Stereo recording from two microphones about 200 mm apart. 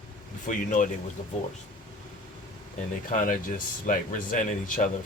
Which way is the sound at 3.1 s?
40° left (ahead or behind).